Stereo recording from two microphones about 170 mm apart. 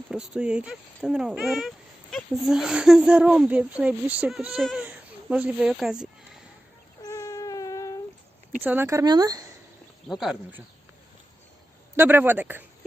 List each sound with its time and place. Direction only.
0.1 s speech: 5° right (ahead or behind)
7.0 s a sound: 20° left (ahead or behind)
8.6 s speech: 10° right (ahead or behind)
10.1 s speech: centre (ahead or behind)
11.9 s a man's voice: 10° right (ahead or behind)